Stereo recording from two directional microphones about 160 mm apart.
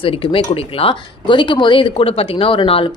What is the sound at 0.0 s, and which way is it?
Speech, 35° left (ahead or behind).